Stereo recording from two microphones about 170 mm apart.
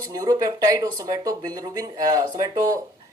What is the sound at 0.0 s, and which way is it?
Speech, 20° right (ahead or behind).